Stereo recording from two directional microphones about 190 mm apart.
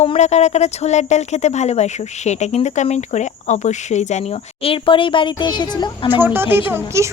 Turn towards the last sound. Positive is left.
turn(degrees=-15)  # may be behind; listen again after turning